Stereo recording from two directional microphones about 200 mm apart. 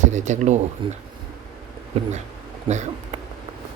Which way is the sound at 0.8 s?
25° right (ahead or behind).